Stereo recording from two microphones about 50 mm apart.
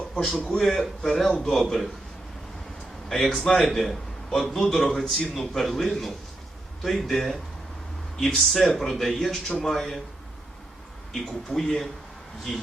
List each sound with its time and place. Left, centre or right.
0.1 s a man's voice: centre
1.3 s a man's voice: centre
1.6 s a man's voice: centre
3.1 s a man's voice: centre
11.1 s speech: centre